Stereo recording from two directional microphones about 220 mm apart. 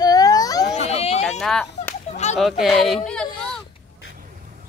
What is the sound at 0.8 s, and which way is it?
Speech, 30° left (ahead or behind).